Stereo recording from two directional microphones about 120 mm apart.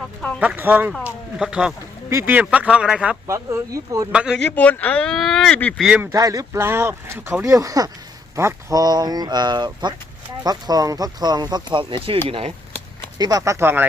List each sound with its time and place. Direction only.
0.3 s speech: 15° right (ahead or behind)
1.0 s a sound: 5° right (ahead or behind)
2.0 s speech: 20° right (ahead or behind)
3.2 s speech: 25° right (ahead or behind)
4.1 s speech: 10° right (ahead or behind)
4.4 s speech: 15° left (ahead or behind)
5.8 s speech: 10° right (ahead or behind)
6.1 s speech: 25° right (ahead or behind)
7.5 s speech: 30° right (ahead or behind)
8.8 s speech: 35° right (ahead or behind); by 12.5 s 55° right (ahead or behind)
13.1 s speech: 30° right (ahead or behind)